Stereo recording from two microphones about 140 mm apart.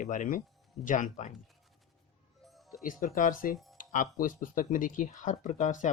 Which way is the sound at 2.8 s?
80° left.